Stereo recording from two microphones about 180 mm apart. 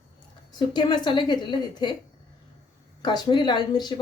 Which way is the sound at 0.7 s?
25° left (ahead or behind).